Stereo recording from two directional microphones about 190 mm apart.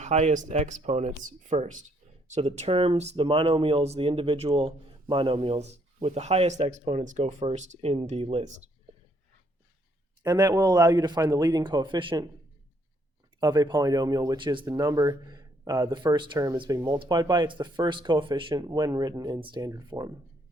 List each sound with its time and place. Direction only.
0.0 s speech: 35° right (ahead or behind)
10.2 s speech: 20° right (ahead or behind)
13.4 s speech: 20° right (ahead or behind)